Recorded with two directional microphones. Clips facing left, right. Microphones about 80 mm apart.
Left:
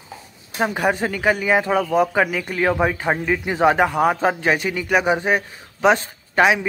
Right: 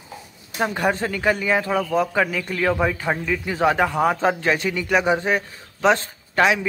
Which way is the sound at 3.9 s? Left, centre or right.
Centre.